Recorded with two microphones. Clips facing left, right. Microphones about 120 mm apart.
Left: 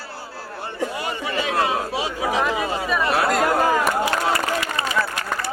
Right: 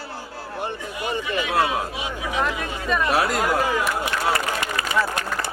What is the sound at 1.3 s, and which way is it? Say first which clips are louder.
Speech: left 1 dB; 35° left (ahead or behind).